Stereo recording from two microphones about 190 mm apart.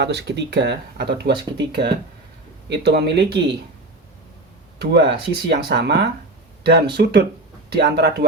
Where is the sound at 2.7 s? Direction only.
65° right (ahead or behind).